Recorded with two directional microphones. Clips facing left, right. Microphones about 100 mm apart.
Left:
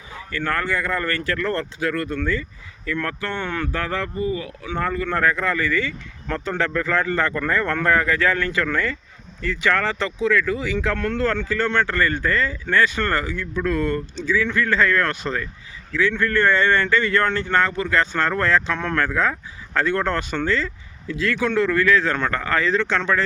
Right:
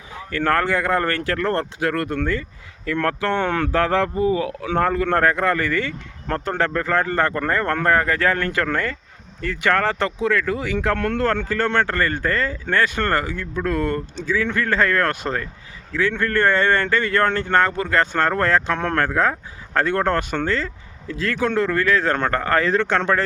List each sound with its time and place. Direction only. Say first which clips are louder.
0.3 s speech: right 4 dB; 90° right; by 23.2 s 50° right (ahead or behind)